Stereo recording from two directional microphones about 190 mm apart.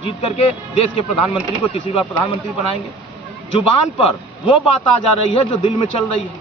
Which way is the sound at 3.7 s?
30° left (ahead or behind).